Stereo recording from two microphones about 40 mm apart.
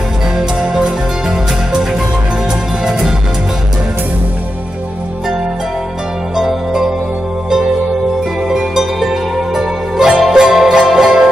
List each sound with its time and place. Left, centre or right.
2.8 s music: centre
6.3 s music: centre
8.5 s music: centre